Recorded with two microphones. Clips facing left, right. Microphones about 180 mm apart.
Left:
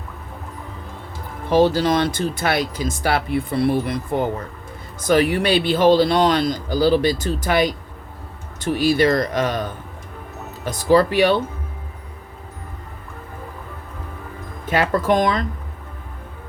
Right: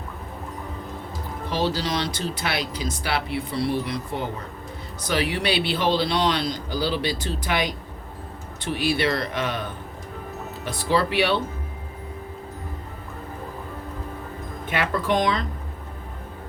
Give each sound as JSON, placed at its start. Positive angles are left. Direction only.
{"t": 1.5, "sound": "speech", "side_deg": 50}
{"t": 10.7, "sound": "speech", "side_deg": 45}
{"t": 14.7, "sound": "speech", "side_deg": 40}